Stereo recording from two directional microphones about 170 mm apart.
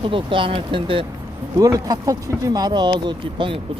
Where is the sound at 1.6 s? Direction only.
20° right (ahead or behind).